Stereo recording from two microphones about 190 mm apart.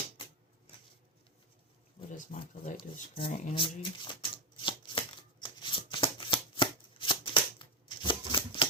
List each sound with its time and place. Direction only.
2.1 s speech: 45° left (ahead or behind)
3.5 s shuffling cards: 25° left (ahead or behind)